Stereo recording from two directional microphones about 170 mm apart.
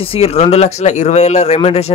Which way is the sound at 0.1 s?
35° left (ahead or behind).